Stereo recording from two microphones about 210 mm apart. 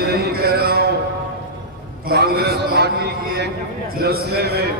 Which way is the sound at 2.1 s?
50° right (ahead or behind).